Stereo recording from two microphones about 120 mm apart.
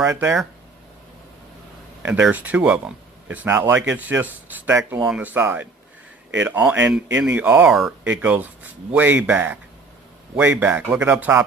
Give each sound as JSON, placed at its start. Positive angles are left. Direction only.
{"t": 0.0, "sound": "speech", "side_deg": -20}
{"t": 2.0, "sound": "speech", "side_deg": -10}